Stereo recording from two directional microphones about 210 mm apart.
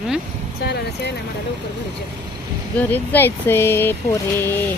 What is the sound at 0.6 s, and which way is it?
Speech, 50° left (ahead or behind).